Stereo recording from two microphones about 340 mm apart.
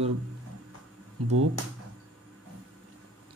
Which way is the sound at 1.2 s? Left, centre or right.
Right.